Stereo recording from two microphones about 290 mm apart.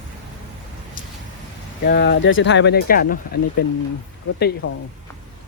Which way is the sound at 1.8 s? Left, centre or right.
Left.